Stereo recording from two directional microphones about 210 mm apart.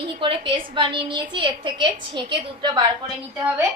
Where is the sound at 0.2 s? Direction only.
25° right (ahead or behind).